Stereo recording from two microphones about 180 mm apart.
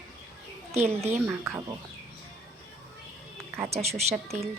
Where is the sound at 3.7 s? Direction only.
35° right (ahead or behind).